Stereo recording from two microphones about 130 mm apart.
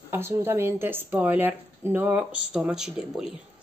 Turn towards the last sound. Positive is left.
turn(degrees=-5)  # may be behind; listen again after turning